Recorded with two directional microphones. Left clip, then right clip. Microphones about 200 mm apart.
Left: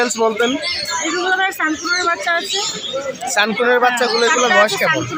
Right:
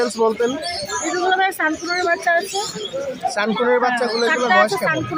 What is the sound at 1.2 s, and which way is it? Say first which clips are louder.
Speech: right 1 dB; 35° right (ahead or behind).